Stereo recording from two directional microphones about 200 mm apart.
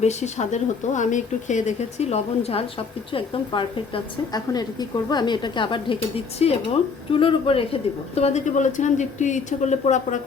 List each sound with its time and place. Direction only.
0.0 s a woman's voice: 35° left (ahead or behind)